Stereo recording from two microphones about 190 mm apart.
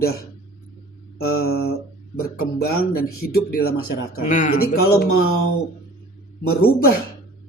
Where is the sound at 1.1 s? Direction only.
55° left (ahead or behind).